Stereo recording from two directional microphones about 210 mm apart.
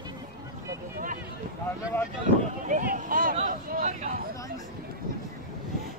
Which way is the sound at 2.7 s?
40° right (ahead or behind).